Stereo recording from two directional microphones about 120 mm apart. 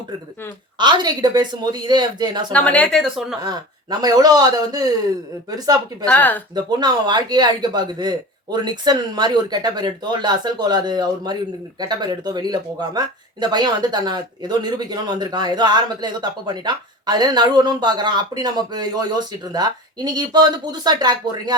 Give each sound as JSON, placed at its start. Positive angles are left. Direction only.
{"t": 0.8, "sound": "speech", "side_deg": -40}
{"t": 2.5, "sound": "a woman's voice", "side_deg": 10}
{"t": 3.0, "sound": "speech", "side_deg": 0}
{"t": 3.4, "sound": "speech", "side_deg": -35}
{"t": 6.1, "sound": "a woman's voice", "side_deg": 15}
{"t": 6.5, "sound": "speech", "side_deg": -35}